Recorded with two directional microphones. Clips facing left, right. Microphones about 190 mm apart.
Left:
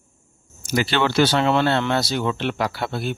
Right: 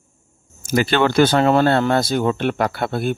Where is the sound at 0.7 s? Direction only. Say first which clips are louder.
Right 4 dB; 50° right (ahead or behind).